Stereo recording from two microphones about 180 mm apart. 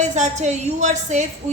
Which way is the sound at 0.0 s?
40° right (ahead or behind).